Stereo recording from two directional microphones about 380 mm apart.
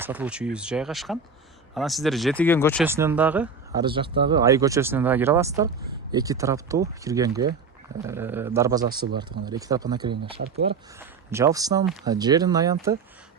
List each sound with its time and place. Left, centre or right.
0.0 s speech: centre
2.8 s speech: centre
10.3 s speech: right
10.7 s speech: centre